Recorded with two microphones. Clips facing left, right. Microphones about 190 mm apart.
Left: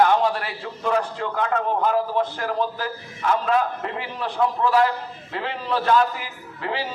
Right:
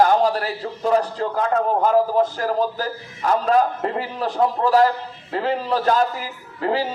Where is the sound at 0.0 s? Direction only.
35° right (ahead or behind).